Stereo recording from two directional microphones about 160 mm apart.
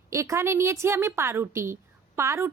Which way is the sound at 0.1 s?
20° right (ahead or behind).